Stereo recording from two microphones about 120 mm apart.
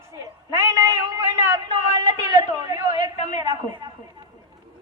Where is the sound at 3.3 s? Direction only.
35° right (ahead or behind).